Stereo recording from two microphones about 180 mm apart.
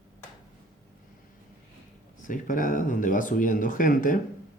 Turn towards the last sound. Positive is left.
turn(degrees=50)  # may be behind; listen again after turning